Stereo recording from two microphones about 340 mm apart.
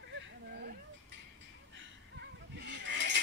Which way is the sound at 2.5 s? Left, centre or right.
Right.